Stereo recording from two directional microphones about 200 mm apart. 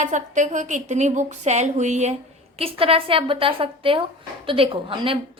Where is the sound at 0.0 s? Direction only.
40° right (ahead or behind).